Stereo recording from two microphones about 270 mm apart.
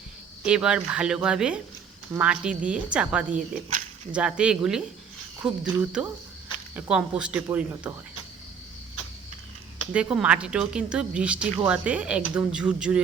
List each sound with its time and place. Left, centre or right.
0.4 s speech: centre
3.2 s speech: right
4.1 s speech: centre
9.9 s speech: centre